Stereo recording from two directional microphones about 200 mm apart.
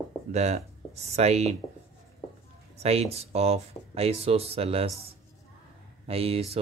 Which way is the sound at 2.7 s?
30° right (ahead or behind).